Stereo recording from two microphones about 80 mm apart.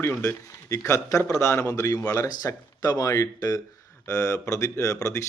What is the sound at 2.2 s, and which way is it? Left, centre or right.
Speech, left.